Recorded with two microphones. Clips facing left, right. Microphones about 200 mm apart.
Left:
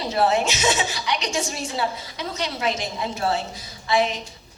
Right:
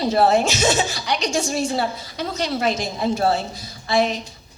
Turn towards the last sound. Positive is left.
turn(degrees=-35)  # may be behind; listen again after turning